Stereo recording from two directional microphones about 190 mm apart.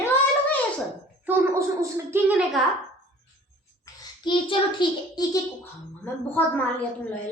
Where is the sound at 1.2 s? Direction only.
10° right (ahead or behind).